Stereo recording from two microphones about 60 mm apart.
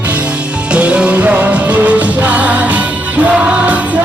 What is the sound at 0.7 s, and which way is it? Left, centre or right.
Music, centre.